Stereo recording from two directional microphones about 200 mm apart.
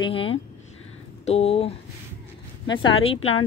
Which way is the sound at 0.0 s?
25° left (ahead or behind).